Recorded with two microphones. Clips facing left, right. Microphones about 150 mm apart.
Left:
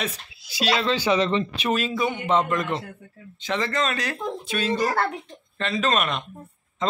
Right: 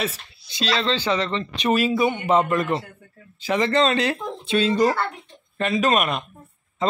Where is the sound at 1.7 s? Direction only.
10° right (ahead or behind).